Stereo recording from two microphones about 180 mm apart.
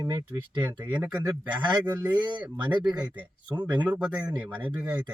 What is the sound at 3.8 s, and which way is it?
Speech, 10° right (ahead or behind).